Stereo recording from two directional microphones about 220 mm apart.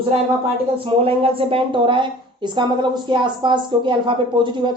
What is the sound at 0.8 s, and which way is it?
A woman's voice, 25° right (ahead or behind).